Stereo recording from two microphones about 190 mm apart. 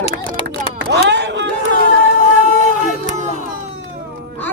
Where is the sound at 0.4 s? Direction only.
65° right (ahead or behind).